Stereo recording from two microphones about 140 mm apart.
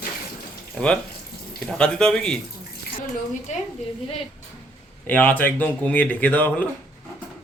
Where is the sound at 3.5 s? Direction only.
60° left (ahead or behind).